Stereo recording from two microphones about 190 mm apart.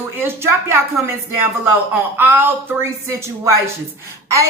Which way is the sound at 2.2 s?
10° right (ahead or behind).